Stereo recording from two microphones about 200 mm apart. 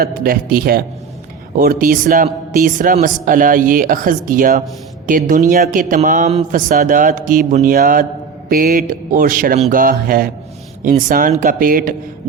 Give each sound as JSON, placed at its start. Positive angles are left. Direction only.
{"t": 0.0, "sound": "speech", "side_deg": -45}